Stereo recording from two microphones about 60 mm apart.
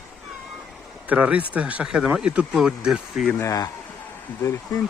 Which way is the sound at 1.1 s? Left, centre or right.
Right.